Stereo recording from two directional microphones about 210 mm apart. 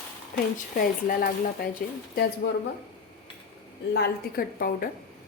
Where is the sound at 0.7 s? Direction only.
45° left (ahead or behind).